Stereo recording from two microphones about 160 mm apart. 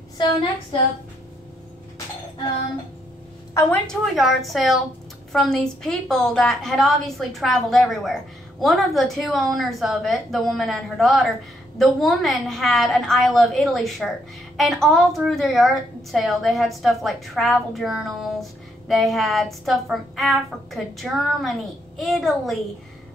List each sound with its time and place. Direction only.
3.7 s a woman's voice: centre (ahead or behind)